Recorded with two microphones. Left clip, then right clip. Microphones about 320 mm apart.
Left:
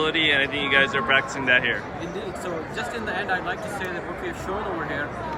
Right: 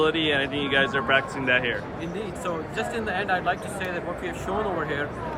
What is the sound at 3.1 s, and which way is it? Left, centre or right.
Speech, right.